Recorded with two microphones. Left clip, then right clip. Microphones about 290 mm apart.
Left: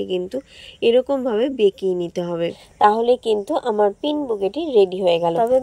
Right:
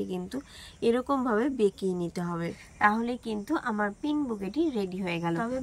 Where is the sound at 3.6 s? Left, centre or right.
Right.